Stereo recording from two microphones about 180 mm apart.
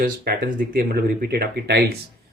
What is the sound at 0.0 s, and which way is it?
Speech, 55° right (ahead or behind).